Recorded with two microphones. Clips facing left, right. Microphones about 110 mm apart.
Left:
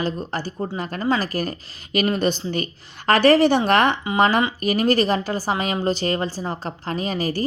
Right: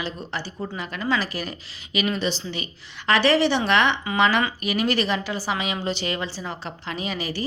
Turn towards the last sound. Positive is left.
turn(degrees=40)  # may be behind; listen again after turning